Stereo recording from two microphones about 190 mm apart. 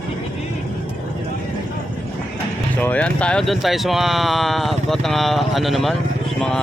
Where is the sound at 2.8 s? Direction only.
5° left (ahead or behind).